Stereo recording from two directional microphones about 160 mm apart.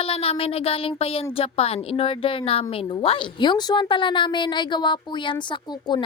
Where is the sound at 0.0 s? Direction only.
35° left (ahead or behind).